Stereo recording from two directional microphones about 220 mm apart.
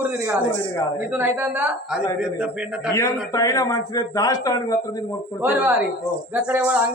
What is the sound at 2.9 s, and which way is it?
A man's voice, 15° left (ahead or behind).